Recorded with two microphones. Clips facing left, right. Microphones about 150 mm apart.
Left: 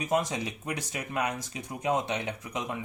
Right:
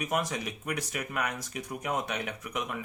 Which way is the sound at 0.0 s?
25° left (ahead or behind).